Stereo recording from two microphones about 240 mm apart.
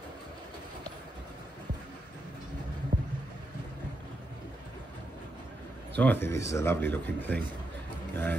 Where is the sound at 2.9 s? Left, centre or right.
Right.